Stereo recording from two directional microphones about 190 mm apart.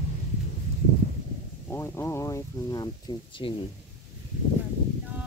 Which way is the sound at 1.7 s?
15° left (ahead or behind).